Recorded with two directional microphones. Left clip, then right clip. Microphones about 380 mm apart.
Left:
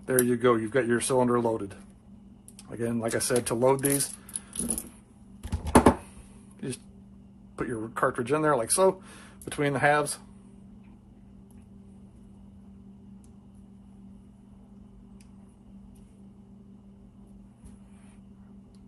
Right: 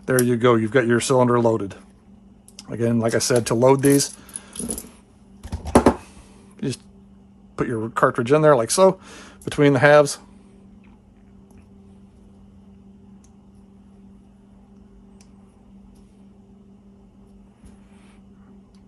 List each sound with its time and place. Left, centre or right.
0.0 s speech: right
6.6 s speech: right